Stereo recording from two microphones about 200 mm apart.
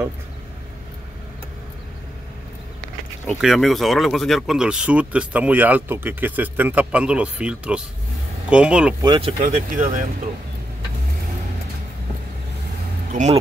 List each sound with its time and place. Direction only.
3.3 s speech: centre (ahead or behind)
9.0 s speech: 20° right (ahead or behind)
9.4 s speech: 40° right (ahead or behind)
13.1 s speech: 35° right (ahead or behind)